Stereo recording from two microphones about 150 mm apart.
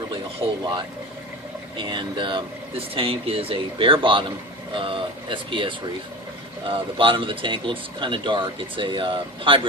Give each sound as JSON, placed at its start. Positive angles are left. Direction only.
{"t": 0.6, "sound": "speech", "side_deg": -30}